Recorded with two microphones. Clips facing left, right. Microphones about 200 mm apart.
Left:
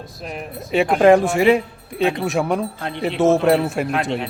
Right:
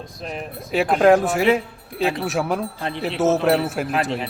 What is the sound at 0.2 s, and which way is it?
Speech, centre (ahead or behind).